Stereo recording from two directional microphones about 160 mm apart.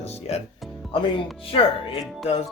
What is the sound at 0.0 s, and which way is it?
Speech, 40° left (ahead or behind).